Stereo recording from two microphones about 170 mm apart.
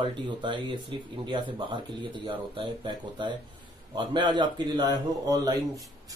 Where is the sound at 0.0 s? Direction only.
25° right (ahead or behind).